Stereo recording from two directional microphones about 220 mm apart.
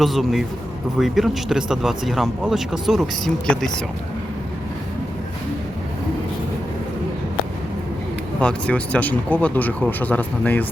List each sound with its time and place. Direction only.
0.0 s speech: centre (ahead or behind)
8.4 s speech: 5° left (ahead or behind)